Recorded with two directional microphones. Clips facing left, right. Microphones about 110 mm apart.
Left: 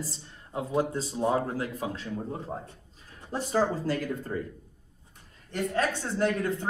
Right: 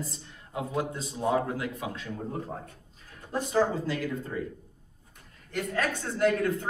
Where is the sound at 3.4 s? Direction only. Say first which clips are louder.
Right 1 dB; 40° left (ahead or behind).